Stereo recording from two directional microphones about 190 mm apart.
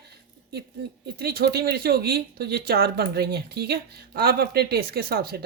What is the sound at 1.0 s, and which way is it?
Speech, 55° right (ahead or behind).